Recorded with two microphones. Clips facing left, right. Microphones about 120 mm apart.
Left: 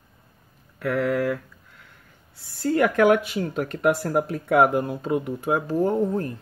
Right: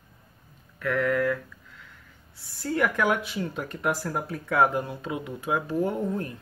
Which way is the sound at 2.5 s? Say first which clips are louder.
Left 5 dB; 65° left (ahead or behind).